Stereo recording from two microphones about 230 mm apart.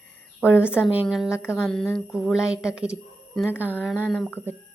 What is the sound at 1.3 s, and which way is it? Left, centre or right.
A woman's voice, centre.